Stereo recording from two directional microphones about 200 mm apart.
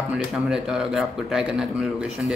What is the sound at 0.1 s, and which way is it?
Speech, centre (ahead or behind).